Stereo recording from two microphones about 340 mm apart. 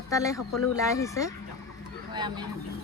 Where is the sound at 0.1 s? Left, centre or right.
Centre.